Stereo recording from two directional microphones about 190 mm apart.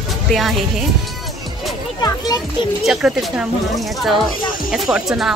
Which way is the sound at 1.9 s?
20° left (ahead or behind).